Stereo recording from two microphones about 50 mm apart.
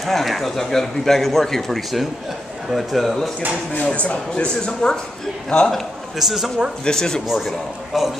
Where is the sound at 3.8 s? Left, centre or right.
Left.